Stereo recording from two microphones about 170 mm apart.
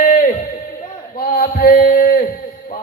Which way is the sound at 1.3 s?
60° left (ahead or behind).